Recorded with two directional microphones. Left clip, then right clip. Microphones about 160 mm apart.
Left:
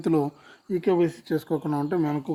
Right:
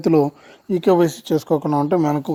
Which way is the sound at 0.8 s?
55° right (ahead or behind).